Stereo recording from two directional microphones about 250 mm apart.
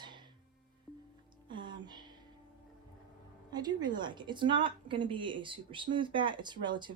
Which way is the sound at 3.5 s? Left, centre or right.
Centre.